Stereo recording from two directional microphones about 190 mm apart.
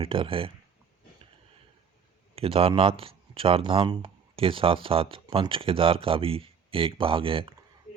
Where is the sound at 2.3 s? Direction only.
30° right (ahead or behind).